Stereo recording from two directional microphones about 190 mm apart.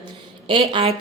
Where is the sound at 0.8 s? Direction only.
25° right (ahead or behind).